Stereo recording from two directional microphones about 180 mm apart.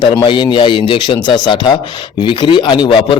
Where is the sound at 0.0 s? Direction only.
25° left (ahead or behind).